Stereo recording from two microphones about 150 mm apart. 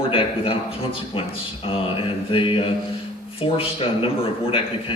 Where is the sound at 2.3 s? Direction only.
35° left (ahead or behind).